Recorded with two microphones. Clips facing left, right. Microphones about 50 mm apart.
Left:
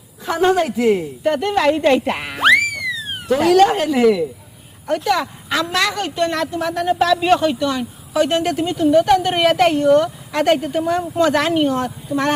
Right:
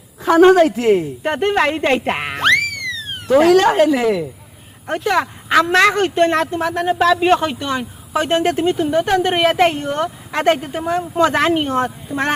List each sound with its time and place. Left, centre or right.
0.3 s a woman's voice: right
1.2 s speech: right
2.3 s boing: centre
3.3 s speech: right
3.9 s speech: right
11.2 s speech: right